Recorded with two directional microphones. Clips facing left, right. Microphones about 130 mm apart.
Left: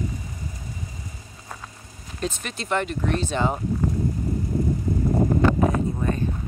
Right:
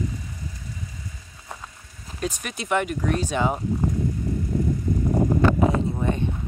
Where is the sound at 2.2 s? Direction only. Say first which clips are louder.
Even; 10° right (ahead or behind).